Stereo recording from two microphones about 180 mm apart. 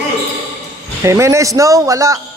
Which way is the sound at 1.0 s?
15° right (ahead or behind).